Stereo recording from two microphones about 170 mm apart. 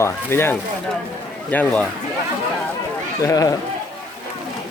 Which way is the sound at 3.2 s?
20° left (ahead or behind).